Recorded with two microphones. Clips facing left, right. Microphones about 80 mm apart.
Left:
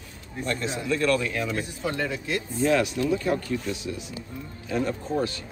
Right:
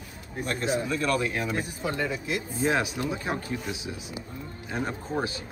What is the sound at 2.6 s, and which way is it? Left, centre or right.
Speech, right.